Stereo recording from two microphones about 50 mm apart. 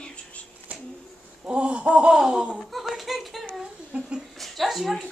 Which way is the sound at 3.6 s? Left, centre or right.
Centre.